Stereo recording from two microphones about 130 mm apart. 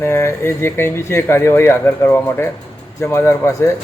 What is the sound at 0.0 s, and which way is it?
Speech, 20° left (ahead or behind).